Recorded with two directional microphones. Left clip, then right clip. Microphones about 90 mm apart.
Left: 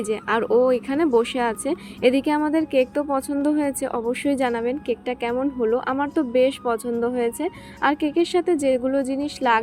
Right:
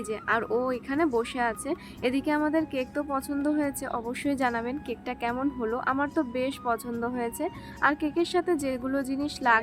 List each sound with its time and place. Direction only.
0.0 s a woman's voice: 35° left (ahead or behind); by 5.3 s 15° left (ahead or behind)
5.3 s speech: centre (ahead or behind)
5.8 s a woman's voice: 25° left (ahead or behind)